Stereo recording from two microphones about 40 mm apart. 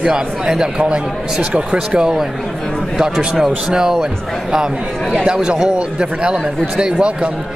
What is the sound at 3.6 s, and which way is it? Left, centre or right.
A man's voice, centre.